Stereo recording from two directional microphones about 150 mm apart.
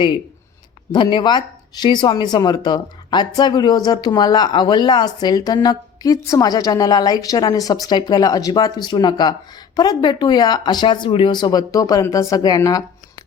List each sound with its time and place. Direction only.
0.9 s speech: 30° left (ahead or behind)